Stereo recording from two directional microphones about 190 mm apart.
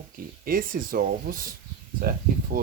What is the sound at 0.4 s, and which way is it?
Speech, 50° right (ahead or behind).